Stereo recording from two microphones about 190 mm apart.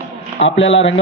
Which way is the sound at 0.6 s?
75° left (ahead or behind).